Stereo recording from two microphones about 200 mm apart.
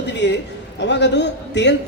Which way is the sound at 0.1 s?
60° left (ahead or behind).